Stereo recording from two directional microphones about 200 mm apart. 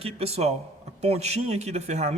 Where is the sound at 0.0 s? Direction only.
30° right (ahead or behind).